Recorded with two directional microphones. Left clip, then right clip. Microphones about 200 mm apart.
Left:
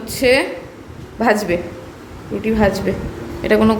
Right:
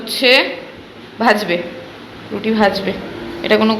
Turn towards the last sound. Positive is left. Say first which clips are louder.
# right 1 dB
turn(degrees=30)  # may be behind; listen again after turning